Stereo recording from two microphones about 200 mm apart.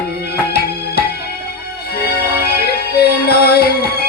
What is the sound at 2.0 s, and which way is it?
Music, 55° left (ahead or behind).